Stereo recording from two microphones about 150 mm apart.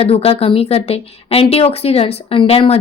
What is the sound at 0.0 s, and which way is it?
A woman's voice, 40° left (ahead or behind).